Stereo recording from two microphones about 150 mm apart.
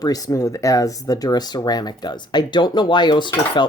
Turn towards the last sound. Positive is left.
turn(degrees=30)  # may be behind; listen again after turning